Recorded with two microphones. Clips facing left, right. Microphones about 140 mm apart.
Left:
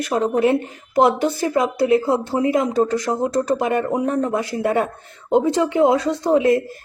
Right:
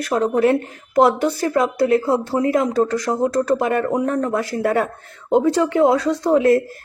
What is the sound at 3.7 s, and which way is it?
Speech, 10° left (ahead or behind).